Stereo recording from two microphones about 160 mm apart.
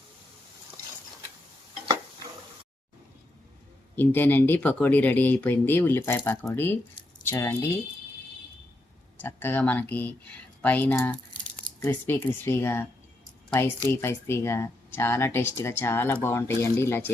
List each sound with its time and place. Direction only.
3.9 s speech: 10° left (ahead or behind)
9.2 s speech: 15° left (ahead or behind)